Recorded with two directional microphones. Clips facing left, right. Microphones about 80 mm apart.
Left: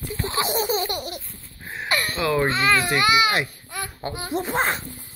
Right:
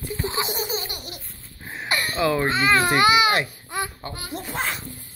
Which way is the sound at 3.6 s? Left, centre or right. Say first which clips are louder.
Right 4 dB; right.